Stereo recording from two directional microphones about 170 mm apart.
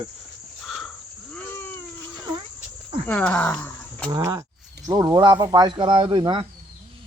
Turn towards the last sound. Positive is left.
turn(degrees=-30)  # may be behind; listen again after turning